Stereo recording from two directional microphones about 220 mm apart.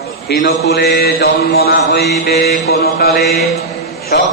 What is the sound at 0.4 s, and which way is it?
Mantra, 45° left (ahead or behind).